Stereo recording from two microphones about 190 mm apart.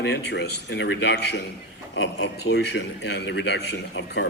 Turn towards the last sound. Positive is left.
turn(degrees=70)  # may be behind; listen again after turning